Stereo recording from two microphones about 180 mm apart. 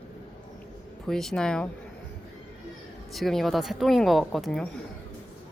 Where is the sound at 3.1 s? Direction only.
Centre (ahead or behind).